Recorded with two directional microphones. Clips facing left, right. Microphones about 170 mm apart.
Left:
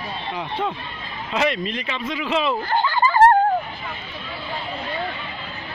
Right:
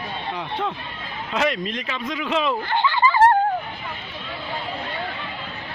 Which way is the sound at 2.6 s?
40° left (ahead or behind).